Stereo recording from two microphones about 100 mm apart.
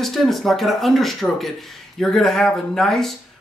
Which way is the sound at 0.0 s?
Centre (ahead or behind).